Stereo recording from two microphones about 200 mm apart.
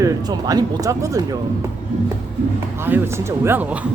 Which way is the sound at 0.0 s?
20° right (ahead or behind).